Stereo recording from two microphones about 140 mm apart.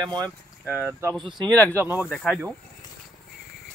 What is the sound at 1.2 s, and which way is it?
Speech, 30° right (ahead or behind).